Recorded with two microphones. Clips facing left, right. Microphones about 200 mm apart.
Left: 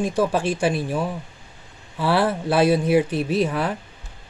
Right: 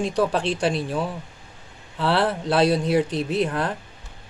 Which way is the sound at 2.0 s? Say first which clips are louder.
Left 1 dB; 10° left (ahead or behind).